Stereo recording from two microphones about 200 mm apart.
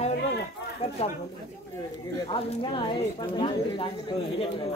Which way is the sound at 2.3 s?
25° left (ahead or behind).